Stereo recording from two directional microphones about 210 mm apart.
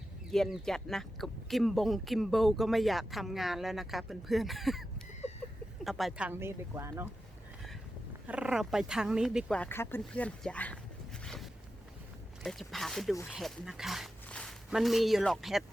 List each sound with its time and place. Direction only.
0.3 s speech: centre (ahead or behind)
8.3 s speech: 5° right (ahead or behind)
12.4 s speech: centre (ahead or behind)